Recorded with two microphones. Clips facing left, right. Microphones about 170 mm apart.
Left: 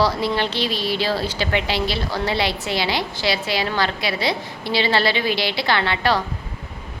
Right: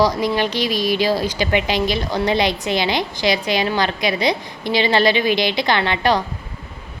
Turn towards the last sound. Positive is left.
turn(degrees=-20)  # may be behind; listen again after turning